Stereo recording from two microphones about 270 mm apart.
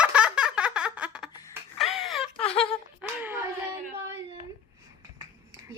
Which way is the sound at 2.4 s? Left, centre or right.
Left.